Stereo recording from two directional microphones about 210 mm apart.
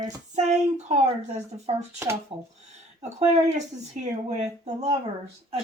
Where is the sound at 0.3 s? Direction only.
35° right (ahead or behind).